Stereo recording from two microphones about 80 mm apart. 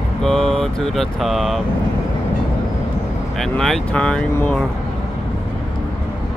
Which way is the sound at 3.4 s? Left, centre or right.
Centre.